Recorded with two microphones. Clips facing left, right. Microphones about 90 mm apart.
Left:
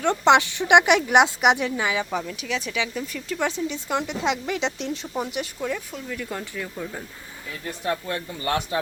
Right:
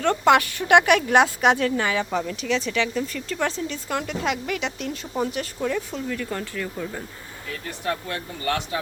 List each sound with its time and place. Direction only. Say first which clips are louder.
0.0 s speech: even; 20° left (ahead or behind)
7.9 s speech: left 1 dB; 20° left (ahead or behind)